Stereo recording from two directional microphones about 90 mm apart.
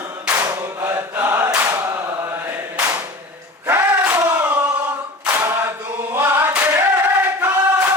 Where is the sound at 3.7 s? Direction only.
25° right (ahead or behind).